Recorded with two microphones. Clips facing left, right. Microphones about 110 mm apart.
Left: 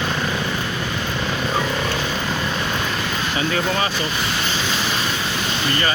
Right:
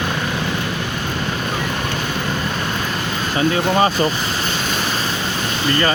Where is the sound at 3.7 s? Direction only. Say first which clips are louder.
Right 7 dB; 40° right (ahead or behind).